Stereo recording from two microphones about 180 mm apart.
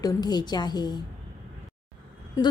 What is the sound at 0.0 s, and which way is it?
Speech, 25° left (ahead or behind).